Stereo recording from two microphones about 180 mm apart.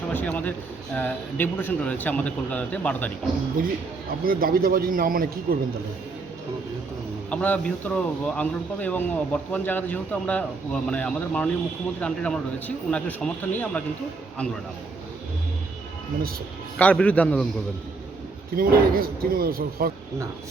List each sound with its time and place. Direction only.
0.1 s speech: 10° left (ahead or behind)
4.3 s speech: 55° right (ahead or behind)
7.3 s a man's voice: 5° left (ahead or behind)
16.7 s speech: 5° left (ahead or behind)
18.5 s a man's voice: 55° right (ahead or behind)